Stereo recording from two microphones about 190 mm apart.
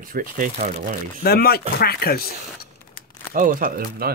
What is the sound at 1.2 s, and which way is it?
Speech, 55° left (ahead or behind).